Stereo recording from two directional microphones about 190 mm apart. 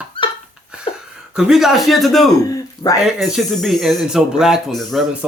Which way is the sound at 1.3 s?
5° right (ahead or behind).